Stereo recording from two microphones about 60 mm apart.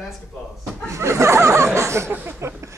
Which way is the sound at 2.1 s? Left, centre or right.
Right.